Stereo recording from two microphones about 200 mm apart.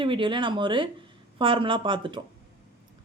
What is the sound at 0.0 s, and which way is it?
Speech, 25° right (ahead or behind).